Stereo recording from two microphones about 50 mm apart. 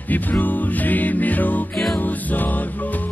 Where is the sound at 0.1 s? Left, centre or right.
Left.